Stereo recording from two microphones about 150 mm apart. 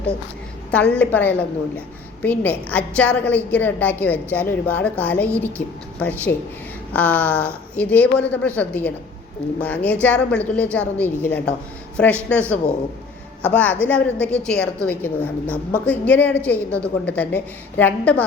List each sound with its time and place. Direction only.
0.7 s a woman's voice: 10° left (ahead or behind)